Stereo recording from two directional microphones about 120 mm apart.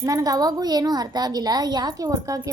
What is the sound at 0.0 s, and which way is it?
A woman's voice, 30° right (ahead or behind).